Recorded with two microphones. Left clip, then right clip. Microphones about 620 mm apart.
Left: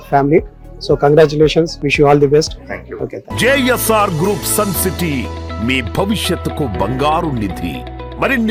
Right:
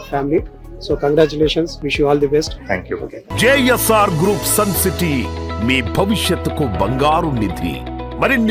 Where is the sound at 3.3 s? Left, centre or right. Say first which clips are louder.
Even; centre.